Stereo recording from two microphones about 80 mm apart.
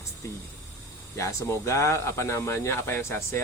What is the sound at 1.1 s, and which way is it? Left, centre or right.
Speech, left.